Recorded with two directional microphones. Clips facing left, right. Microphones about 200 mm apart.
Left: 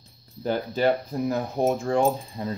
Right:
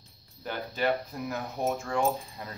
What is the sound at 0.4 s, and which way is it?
Speech, 35° left (ahead or behind).